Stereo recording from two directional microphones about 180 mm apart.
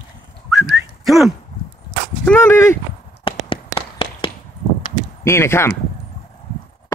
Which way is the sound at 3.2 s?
30° left (ahead or behind).